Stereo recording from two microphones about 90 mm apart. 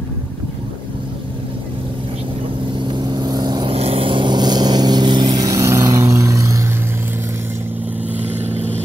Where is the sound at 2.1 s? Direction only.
85° right; by 3.7 s 50° right (ahead or behind).